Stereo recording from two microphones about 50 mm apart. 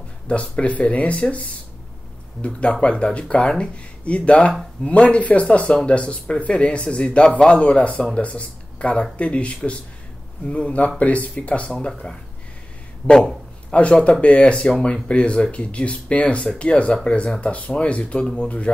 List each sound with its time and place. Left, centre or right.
0.3 s speech: left
2.7 s speech: left
13.7 s a man's voice: left
14.4 s speech: centre
18.2 s speech: centre